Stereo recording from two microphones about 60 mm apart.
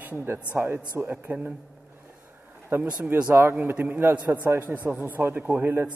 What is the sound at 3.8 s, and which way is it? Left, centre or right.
Speech, right.